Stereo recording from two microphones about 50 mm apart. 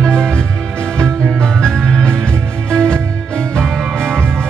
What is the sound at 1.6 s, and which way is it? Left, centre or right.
Music, centre.